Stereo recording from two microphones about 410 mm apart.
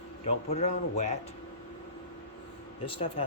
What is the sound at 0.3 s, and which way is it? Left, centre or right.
Speech, centre.